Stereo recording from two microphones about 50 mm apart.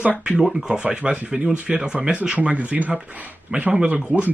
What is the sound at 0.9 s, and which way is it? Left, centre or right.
Speech, right.